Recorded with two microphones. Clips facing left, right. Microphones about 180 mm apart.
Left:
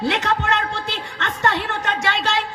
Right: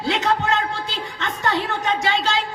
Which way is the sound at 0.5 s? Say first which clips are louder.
Even; 70° left (ahead or behind).